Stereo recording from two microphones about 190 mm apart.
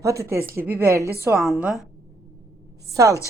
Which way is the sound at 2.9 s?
15° right (ahead or behind).